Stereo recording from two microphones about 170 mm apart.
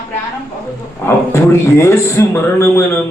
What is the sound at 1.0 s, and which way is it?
A man's voice, 15° left (ahead or behind).